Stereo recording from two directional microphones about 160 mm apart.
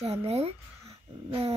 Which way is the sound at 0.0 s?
40° right (ahead or behind).